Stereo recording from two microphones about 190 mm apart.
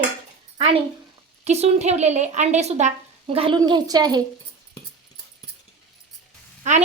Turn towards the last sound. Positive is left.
turn(degrees=-35)  # may be behind; listen again after turning